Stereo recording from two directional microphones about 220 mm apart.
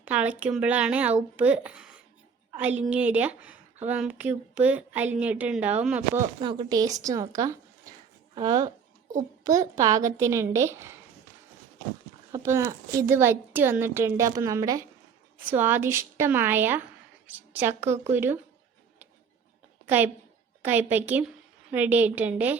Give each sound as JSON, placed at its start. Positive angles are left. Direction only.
{"t": 0.0, "sound": "speech", "side_deg": -5}
{"t": 6.4, "sound": "speech", "side_deg": -20}
{"t": 12.3, "sound": "speech", "side_deg": -15}
{"t": 19.8, "sound": "a sound", "side_deg": -10}
{"t": 20.6, "sound": "speech", "side_deg": -10}